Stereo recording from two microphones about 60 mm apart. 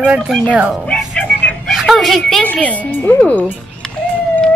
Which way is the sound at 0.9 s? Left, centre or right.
Centre.